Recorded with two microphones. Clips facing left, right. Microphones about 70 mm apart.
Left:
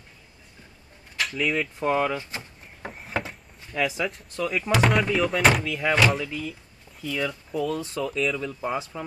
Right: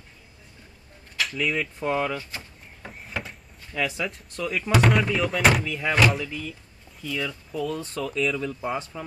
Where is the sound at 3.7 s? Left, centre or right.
Centre.